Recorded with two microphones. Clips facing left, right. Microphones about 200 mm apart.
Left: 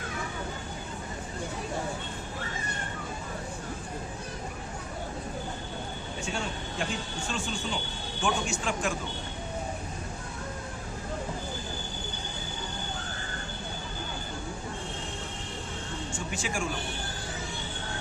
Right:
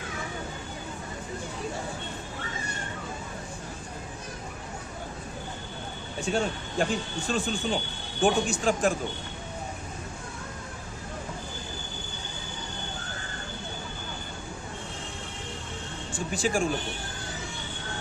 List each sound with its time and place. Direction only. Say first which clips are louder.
6.3 s speech: right 9 dB; 45° right (ahead or behind)
16.1 s speech: right 8 dB; 35° right (ahead or behind)